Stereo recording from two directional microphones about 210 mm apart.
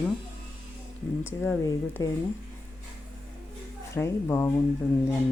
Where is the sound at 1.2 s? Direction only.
10° left (ahead or behind).